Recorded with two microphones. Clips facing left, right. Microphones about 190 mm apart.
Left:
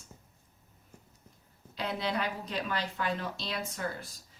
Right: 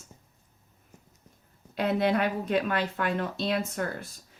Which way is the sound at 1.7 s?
55° right (ahead or behind).